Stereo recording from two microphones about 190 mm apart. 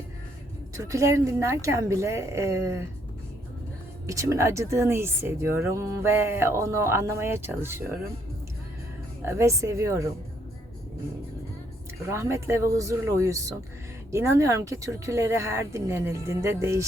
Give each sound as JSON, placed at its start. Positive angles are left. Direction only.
{"t": 0.8, "sound": "speech", "side_deg": -15}
{"t": 4.0, "sound": "speech", "side_deg": -15}
{"t": 9.2, "sound": "speech", "side_deg": -15}
{"t": 12.1, "sound": "speech", "side_deg": -15}